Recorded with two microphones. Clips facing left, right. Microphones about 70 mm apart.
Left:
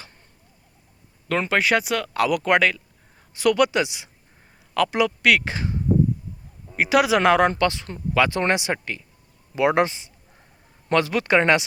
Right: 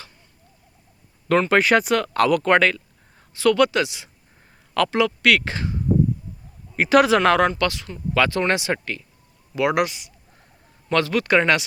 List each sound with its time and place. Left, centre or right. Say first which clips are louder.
1.5 s speech: right 1 dB; centre
3.3 s speech: right 1 dB; centre
4.7 s speech: right 1 dB; centre
4.9 s speech: right 1 dB; centre
6.7 s speech: right 3 dB; centre
7.2 s speech: even; centre
9.6 s speech: left 1 dB; left